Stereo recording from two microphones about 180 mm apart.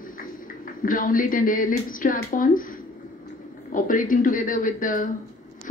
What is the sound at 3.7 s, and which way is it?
A man's voice, 50° left (ahead or behind).